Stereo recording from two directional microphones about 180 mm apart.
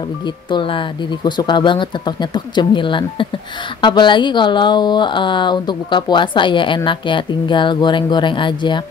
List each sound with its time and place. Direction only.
0.5 s speech: 25° left (ahead or behind)